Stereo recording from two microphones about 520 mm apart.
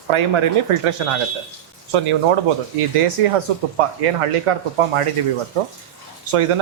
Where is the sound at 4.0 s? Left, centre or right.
Right.